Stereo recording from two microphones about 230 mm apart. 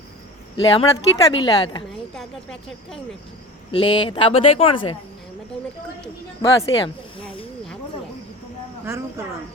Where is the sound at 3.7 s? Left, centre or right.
Left.